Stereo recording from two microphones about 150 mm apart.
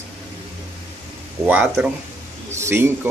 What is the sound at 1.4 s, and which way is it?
Speech, 10° right (ahead or behind).